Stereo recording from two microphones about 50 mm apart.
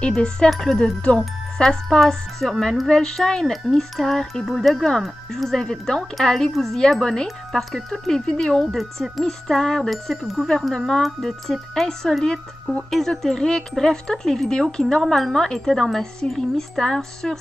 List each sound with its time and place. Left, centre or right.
0.1 s a woman's voice: centre
9.8 s a woman's voice: centre